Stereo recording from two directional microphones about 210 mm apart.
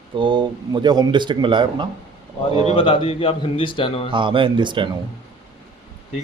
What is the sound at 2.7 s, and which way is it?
A man's voice, 25° left (ahead or behind).